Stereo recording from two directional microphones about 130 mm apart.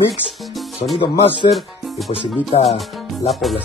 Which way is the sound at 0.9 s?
45° left (ahead or behind).